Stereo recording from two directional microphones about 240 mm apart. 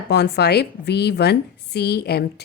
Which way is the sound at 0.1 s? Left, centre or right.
Left.